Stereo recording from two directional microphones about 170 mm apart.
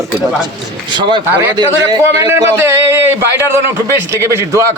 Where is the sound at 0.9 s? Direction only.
25° right (ahead or behind).